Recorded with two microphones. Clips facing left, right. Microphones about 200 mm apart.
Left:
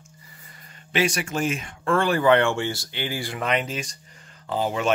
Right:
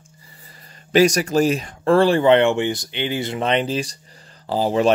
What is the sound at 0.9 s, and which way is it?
Speech, 40° right (ahead or behind).